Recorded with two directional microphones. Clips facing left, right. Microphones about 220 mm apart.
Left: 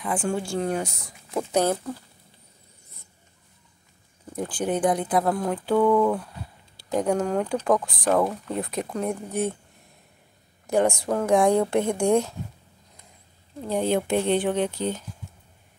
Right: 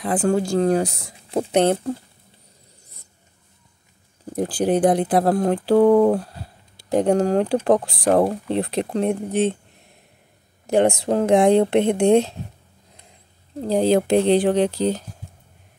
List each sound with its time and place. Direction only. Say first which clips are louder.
0.1 s speech: right 7 dB; 40° right (ahead or behind)
4.3 s speech: right 6 dB; 35° right (ahead or behind)
10.7 s speech: right 4 dB; 25° right (ahead or behind)
13.6 s speech: right 6 dB; 35° right (ahead or behind)